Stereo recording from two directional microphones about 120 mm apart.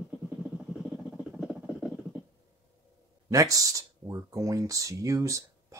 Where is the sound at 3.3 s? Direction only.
30° right (ahead or behind).